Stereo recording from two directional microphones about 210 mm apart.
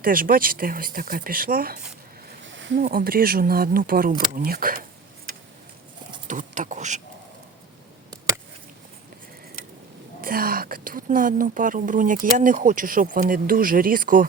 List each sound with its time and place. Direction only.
0.0 s speech: 45° right (ahead or behind)
2.4 s rowboat: 60° right (ahead or behind)
2.7 s speech: 40° right (ahead or behind)
6.2 s speech: 35° right (ahead or behind)
10.2 s speech: 45° right (ahead or behind)